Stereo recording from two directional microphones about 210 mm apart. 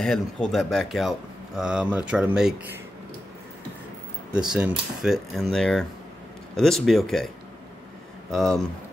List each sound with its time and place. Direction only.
0.0 s speech: centre (ahead or behind)
4.3 s speech: 5° right (ahead or behind)
8.3 s speech: centre (ahead or behind)